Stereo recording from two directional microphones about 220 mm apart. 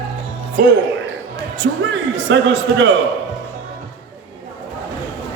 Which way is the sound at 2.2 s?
55° right (ahead or behind).